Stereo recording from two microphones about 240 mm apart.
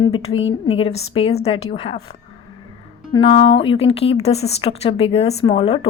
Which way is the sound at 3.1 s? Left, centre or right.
Left.